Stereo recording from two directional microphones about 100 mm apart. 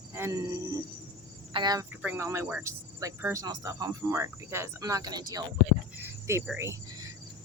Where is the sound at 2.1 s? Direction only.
25° right (ahead or behind); by 5.4 s 40° right (ahead or behind).